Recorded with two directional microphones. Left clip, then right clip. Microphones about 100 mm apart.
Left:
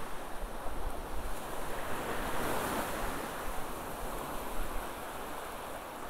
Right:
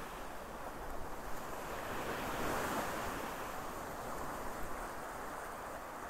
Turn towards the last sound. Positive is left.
turn(degrees=20)  # may be behind; listen again after turning